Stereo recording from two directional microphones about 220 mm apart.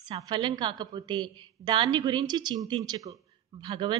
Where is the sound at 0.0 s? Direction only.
20° right (ahead or behind).